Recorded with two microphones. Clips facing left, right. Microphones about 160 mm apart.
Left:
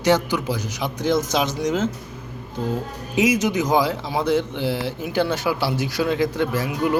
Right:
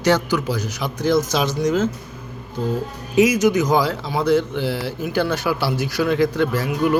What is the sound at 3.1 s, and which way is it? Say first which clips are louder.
A man's voice: right 4 dB; 25° left (ahead or behind).